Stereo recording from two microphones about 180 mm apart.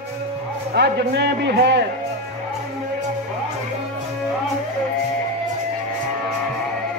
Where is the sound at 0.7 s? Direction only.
70° right (ahead or behind).